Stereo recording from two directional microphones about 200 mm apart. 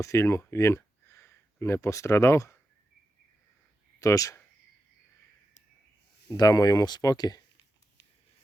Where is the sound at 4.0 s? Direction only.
15° left (ahead or behind).